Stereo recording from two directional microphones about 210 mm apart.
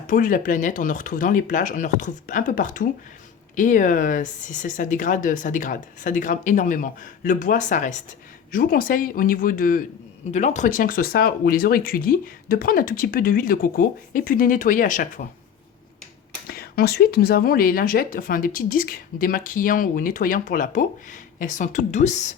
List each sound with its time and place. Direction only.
0.1 s speech: 40° left (ahead or behind)
16.5 s speech: 45° left (ahead or behind)